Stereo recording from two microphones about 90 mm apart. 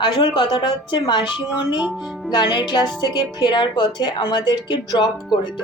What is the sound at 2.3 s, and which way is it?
Speech, 50° left (ahead or behind).